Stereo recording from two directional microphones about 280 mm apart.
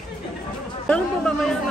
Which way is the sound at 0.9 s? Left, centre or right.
Centre.